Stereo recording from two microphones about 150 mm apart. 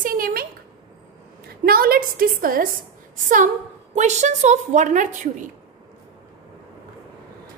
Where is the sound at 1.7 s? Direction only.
80° right.